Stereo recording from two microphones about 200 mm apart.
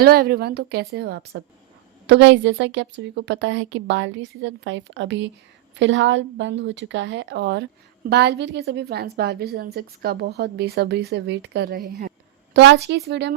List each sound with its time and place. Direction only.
0.0 s a woman's voice: 50° right (ahead or behind)